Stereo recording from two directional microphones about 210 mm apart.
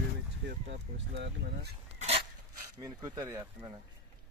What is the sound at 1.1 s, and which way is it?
Speech, 50° right (ahead or behind).